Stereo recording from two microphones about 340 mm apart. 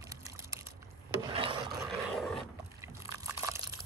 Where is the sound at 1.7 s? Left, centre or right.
Centre.